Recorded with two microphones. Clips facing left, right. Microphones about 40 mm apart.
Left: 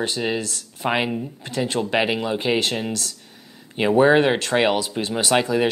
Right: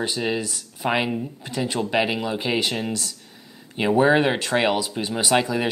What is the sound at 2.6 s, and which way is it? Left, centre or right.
Speech, centre.